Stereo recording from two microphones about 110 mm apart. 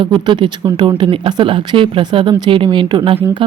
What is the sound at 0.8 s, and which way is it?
Speech, 45° right (ahead or behind).